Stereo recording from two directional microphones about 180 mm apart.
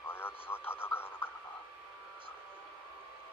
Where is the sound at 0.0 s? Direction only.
10° left (ahead or behind).